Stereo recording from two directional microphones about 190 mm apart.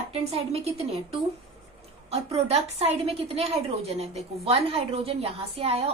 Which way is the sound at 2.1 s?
35° right (ahead or behind).